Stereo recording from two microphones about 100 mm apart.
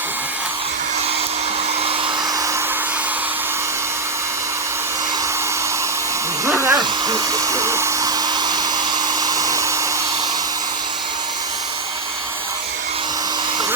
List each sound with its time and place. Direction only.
6.4 s hair dryer: 25° right (ahead or behind)
6.7 s hair dryer: 40° right (ahead or behind)
8.4 s hair dryer: 40° right (ahead or behind)